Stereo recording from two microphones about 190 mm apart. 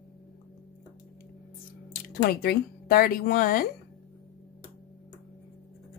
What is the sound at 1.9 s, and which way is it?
Speech, 50° left (ahead or behind).